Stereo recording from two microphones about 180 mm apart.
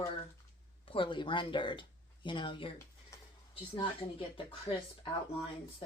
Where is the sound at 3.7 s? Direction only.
30° left (ahead or behind).